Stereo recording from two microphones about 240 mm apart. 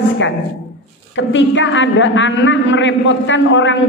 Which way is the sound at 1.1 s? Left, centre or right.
Left.